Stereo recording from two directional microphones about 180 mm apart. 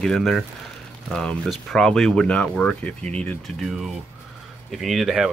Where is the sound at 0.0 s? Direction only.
5° left (ahead or behind).